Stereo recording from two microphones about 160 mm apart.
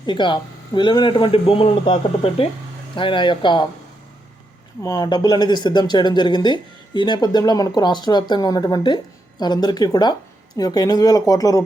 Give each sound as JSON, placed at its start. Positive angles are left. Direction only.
{"t": 0.0, "sound": "a man's voice", "side_deg": 30}
{"t": 4.8, "sound": "speech", "side_deg": 25}